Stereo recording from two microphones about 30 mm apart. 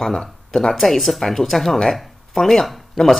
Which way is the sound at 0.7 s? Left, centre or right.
Centre.